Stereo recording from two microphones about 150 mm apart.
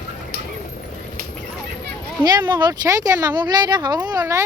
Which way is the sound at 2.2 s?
25° right (ahead or behind).